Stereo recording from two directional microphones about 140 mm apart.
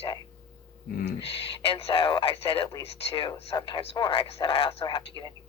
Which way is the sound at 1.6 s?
45° left (ahead or behind).